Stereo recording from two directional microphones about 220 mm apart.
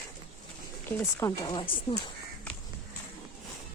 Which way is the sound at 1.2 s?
20° left (ahead or behind).